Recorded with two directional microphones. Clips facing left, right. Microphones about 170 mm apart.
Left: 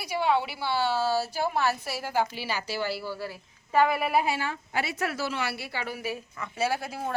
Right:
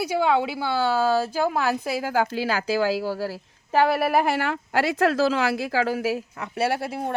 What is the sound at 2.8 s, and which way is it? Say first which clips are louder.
A woman's voice: right 8 dB; 90° right.